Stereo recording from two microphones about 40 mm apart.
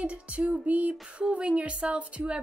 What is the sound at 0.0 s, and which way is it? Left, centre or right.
A woman's voice, right.